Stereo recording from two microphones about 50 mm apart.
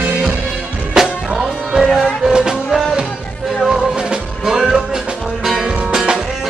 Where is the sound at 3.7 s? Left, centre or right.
Centre.